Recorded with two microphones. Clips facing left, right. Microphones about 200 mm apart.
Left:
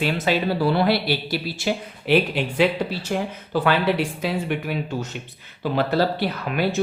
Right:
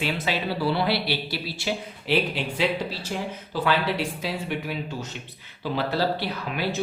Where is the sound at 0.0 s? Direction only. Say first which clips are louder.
Left 5 dB; 50° left (ahead or behind).